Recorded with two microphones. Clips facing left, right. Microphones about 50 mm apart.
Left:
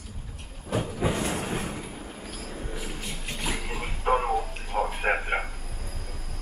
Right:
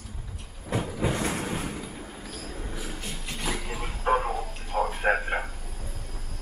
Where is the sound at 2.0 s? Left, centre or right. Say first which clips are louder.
Even; centre.